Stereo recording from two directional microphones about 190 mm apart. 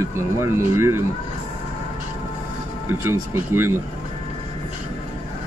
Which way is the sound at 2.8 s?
10° right (ahead or behind).